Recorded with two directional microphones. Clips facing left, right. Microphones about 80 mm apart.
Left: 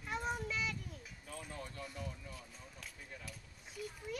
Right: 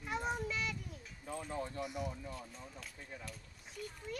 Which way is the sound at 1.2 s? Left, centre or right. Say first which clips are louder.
Right 7 dB; right.